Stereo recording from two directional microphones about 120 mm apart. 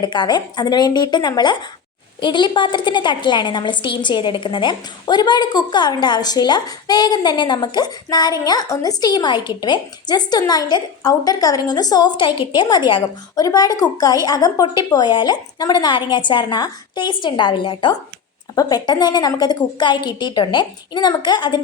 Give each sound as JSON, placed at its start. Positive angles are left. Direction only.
{"t": 0.0, "sound": "a woman's voice", "side_deg": 40}
{"t": 18.5, "sound": "a woman's voice", "side_deg": 35}